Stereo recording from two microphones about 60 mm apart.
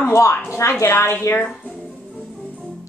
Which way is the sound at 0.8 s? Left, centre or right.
Left.